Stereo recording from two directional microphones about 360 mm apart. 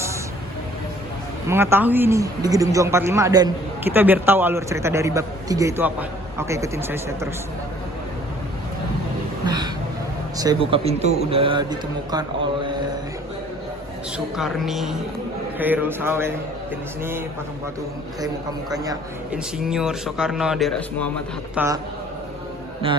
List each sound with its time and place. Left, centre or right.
1.5 s speech: centre
10.3 s speech: centre
14.3 s speech: centre
18.7 s speech: centre
22.8 s speech: centre